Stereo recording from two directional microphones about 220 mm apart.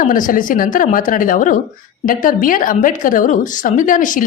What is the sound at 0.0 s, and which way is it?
A woman's voice, 40° left (ahead or behind).